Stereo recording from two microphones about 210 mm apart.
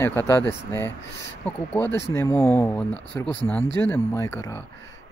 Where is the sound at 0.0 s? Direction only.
10° left (ahead or behind).